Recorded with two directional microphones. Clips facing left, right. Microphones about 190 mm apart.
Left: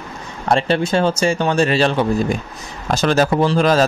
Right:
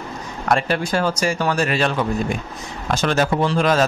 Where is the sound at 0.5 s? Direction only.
25° left (ahead or behind).